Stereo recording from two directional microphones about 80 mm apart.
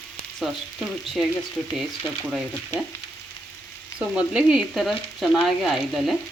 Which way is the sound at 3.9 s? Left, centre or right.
Centre.